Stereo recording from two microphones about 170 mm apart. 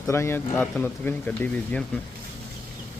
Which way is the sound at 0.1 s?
15° left (ahead or behind).